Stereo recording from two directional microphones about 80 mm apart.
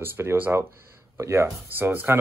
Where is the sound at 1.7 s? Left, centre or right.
Right.